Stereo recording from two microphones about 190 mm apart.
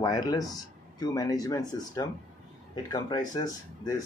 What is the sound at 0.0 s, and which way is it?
Speech, 20° left (ahead or behind).